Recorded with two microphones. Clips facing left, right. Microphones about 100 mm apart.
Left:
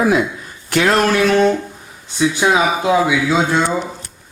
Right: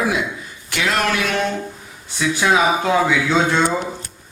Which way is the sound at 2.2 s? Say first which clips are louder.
Left 2 dB; 20° left (ahead or behind).